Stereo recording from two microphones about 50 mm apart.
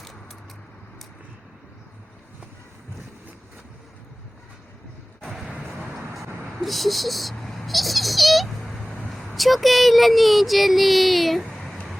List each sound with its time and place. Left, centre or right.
5.5 s vehicle: centre
6.6 s a sound: centre
9.0 s speech: centre